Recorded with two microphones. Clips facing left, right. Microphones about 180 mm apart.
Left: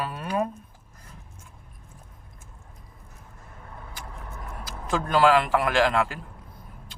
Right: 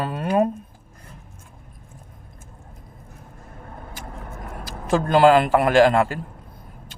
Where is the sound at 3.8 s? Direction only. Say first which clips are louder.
Right 3 dB; 50° right (ahead or behind).